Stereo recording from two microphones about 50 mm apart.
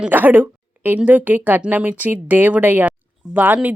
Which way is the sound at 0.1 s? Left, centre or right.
Right.